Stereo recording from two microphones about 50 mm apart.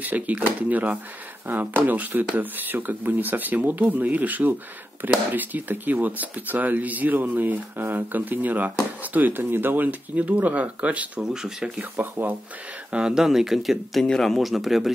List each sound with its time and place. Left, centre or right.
0.0 s speech: right
11.1 s speech: centre
11.8 s speech: right
12.9 s speech: centre
14.0 s speech: centre
14.3 s speech: centre